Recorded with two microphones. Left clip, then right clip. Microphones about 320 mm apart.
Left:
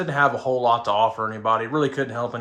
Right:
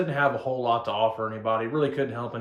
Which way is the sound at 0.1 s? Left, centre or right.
Left.